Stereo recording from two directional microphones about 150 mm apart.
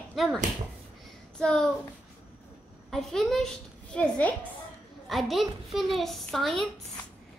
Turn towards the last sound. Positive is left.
turn(degrees=0)  # may be behind; listen again after turning